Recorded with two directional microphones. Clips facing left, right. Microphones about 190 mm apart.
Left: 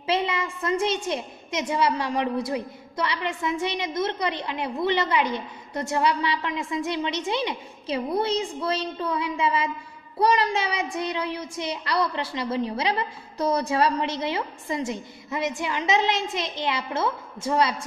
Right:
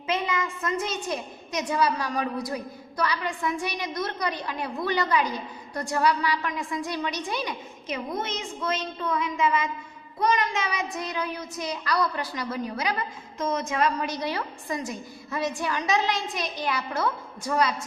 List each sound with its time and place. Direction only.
0.0 s a woman's voice: 30° left (ahead or behind)